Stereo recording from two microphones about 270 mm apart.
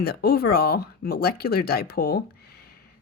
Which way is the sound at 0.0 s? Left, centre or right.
Left.